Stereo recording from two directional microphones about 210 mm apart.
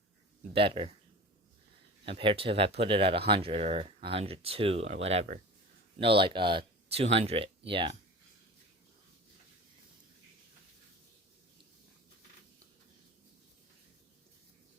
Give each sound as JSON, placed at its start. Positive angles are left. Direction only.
{"t": 0.5, "sound": "speech", "side_deg": -25}
{"t": 2.0, "sound": "speech", "side_deg": -25}